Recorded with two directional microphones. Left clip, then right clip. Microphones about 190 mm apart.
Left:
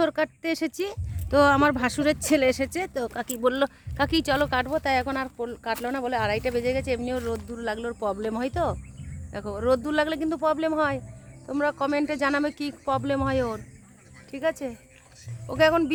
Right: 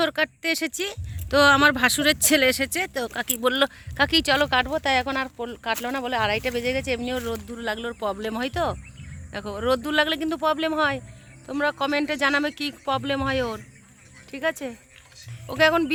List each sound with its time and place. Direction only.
0.0 s speech: 5° left (ahead or behind); by 7.9 s 20° right (ahead or behind)
7.9 s speech: 10° right (ahead or behind)